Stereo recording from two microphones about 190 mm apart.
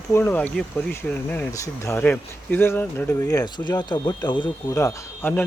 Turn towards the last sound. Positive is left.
turn(degrees=15)  # may be behind; listen again after turning